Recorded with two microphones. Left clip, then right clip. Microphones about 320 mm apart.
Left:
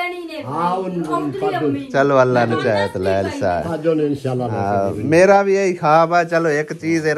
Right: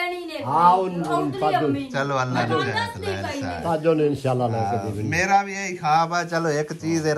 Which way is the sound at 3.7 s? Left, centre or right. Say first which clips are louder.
Left 2 dB; right.